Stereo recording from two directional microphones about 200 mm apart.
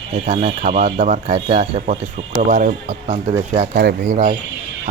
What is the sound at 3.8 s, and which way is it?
Speech, 45° right (ahead or behind).